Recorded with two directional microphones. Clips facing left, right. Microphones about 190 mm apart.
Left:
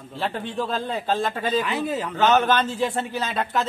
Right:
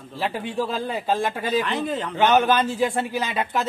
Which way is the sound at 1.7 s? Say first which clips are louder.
Even; 5° left (ahead or behind).